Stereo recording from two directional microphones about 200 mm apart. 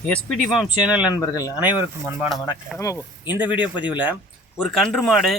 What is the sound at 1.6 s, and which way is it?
Speech, 10° right (ahead or behind).